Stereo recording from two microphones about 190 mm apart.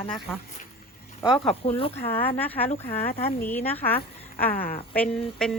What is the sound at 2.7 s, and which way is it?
Speech, 50° left (ahead or behind).